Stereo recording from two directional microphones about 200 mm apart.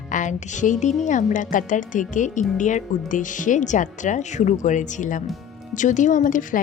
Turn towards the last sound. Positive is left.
turn(degrees=40)  # may be behind; listen again after turning